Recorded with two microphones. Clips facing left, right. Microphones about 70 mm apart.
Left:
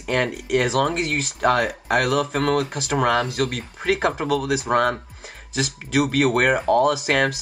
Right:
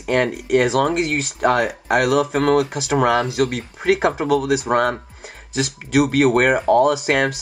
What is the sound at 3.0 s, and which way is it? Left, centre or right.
Speech, centre.